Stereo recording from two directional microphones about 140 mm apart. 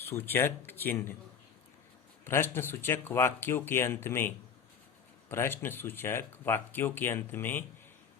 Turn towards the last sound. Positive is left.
turn(degrees=15)  # may be behind; listen again after turning